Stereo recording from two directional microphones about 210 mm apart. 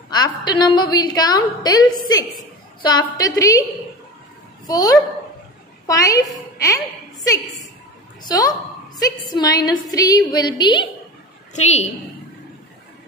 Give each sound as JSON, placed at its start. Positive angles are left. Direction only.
{"t": 0.1, "sound": "a woman's voice", "side_deg": 20}
{"t": 4.6, "sound": "a woman's voice", "side_deg": 20}
{"t": 8.2, "sound": "a woman's voice", "side_deg": 20}
{"t": 11.5, "sound": "a woman's voice", "side_deg": 30}